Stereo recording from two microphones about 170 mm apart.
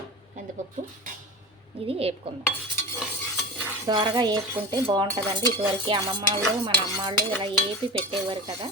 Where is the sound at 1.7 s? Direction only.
35° right (ahead or behind).